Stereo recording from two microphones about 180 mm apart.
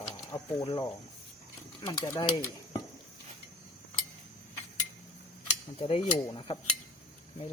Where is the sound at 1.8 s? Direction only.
25° left (ahead or behind).